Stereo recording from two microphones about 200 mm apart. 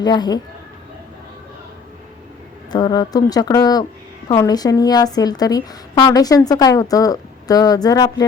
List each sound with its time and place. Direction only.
0.0 s a woman's voice: 20° left (ahead or behind)
2.7 s a woman's voice: 20° left (ahead or behind)